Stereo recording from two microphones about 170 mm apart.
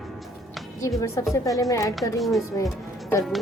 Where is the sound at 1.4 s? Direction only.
20° left (ahead or behind).